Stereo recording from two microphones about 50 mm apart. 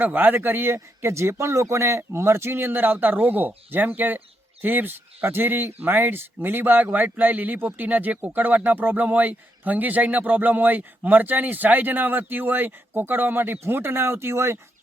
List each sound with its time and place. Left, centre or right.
0.0 s speech: right